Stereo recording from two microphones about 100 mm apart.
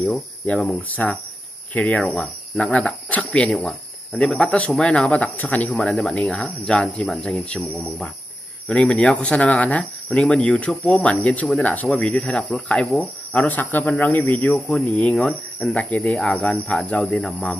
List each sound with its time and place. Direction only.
0.1 s speech: 10° left (ahead or behind)